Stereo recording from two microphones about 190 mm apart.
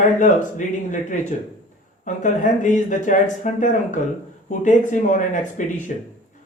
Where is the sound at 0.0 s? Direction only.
40° left (ahead or behind).